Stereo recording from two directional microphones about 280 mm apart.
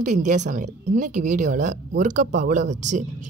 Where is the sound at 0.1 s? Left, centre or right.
Right.